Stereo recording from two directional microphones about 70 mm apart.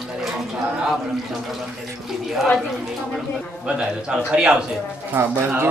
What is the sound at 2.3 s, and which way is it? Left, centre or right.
Speech, centre.